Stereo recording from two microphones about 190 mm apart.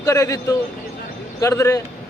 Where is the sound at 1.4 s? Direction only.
15° left (ahead or behind).